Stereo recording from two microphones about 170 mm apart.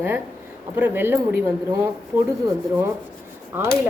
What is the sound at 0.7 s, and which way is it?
A woman's voice, 10° right (ahead or behind).